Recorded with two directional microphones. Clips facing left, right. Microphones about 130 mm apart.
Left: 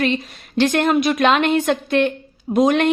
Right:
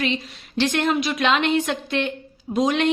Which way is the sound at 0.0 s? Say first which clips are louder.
Left 5 dB; 50° left (ahead or behind).